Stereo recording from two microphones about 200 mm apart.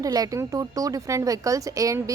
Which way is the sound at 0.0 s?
15° right (ahead or behind).